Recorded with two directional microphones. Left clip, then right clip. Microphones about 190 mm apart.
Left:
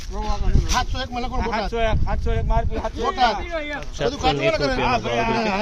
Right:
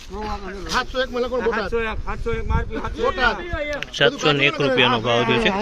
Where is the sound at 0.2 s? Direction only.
20° left (ahead or behind).